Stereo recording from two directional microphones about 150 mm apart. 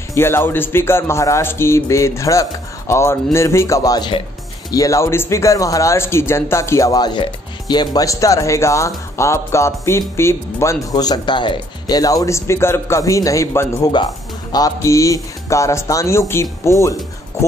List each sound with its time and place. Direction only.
0.1 s speech: 15° left (ahead or behind)